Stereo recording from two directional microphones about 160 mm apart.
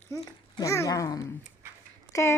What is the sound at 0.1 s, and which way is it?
A woman's voice, 20° left (ahead or behind).